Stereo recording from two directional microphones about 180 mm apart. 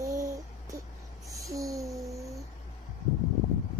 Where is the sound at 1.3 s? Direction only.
20° right (ahead or behind).